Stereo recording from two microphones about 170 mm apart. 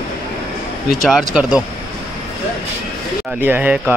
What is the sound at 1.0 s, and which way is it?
Speech, centre (ahead or behind).